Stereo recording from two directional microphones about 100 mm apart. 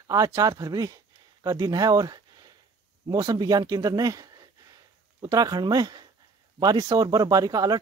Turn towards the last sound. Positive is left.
turn(degrees=-40)  # may be behind; listen again after turning